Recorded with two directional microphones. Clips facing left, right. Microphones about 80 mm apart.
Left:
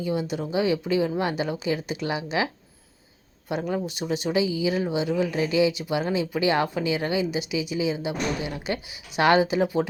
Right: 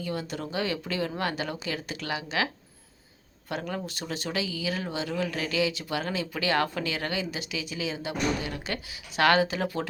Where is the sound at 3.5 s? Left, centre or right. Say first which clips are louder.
Left 6 dB; centre.